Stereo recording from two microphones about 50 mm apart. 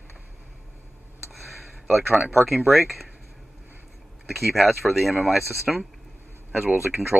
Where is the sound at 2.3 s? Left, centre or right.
Centre.